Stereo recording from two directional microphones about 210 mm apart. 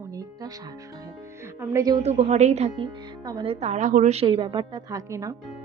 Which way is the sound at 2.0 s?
30° right (ahead or behind).